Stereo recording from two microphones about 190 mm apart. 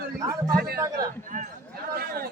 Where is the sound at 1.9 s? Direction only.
55° right (ahead or behind).